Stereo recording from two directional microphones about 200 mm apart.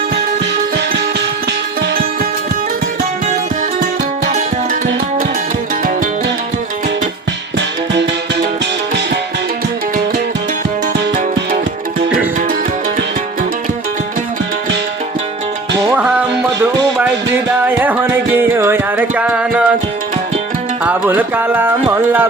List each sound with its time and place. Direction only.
4.3 s music: 45° right (ahead or behind)
11.1 s music: 40° right (ahead or behind)
16.0 s music: 5° right (ahead or behind)
20.8 s music: 10° right (ahead or behind)